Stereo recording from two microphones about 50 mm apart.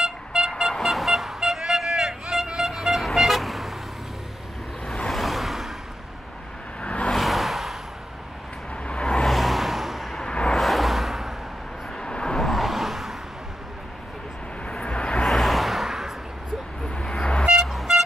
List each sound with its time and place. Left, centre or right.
0.0 s vehicle: centre
4.8 s waves: centre
5.1 s a sound: centre
6.8 s vehicle: left
7.2 s a sound: centre
8.8 s vehicle: left
9.2 s vehicle: centre
10.1 s vehicle: centre
12.0 s vehicle: centre
12.4 s vehicle: centre
14.7 s vehicle: left
15.2 s a sound: centre
16.9 s vehicle: centre
17.6 s music: centre